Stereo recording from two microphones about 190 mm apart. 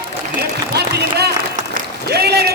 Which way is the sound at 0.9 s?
60° right (ahead or behind).